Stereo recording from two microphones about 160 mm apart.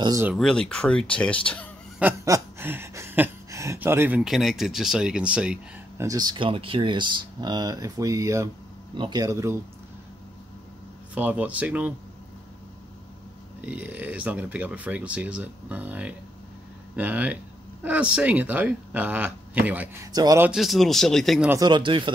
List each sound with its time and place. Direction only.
0.0 s speech: 20° right (ahead or behind)
0.3 s speech: centre (ahead or behind)
2.0 s chuckle: 15° right (ahead or behind)
5.9 s speech: 20° right (ahead or behind)
11.1 s speech: 10° right (ahead or behind)
13.6 s speech: 10° right (ahead or behind)
20.1 s speech: 20° right (ahead or behind)
20.4 s speech: centre (ahead or behind)
21.5 s speech: 25° right (ahead or behind)